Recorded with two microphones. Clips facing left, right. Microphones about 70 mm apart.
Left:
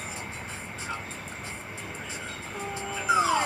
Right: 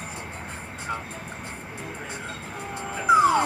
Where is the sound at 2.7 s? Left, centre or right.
Right.